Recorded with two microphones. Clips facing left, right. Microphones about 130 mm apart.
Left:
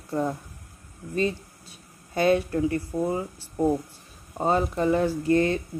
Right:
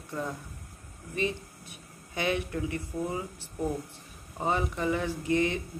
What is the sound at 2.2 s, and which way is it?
Speech, 40° left (ahead or behind).